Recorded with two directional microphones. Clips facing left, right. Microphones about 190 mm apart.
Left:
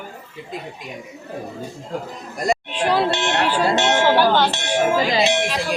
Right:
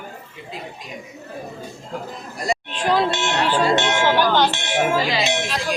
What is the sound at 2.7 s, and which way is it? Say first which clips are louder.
Music: right 2 dB; 10° left (ahead or behind).